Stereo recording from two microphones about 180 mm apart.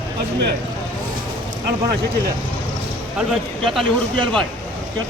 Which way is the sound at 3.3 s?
Centre (ahead or behind).